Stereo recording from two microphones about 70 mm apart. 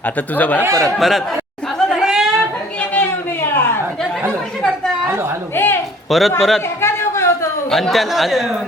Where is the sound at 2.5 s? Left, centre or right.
Left.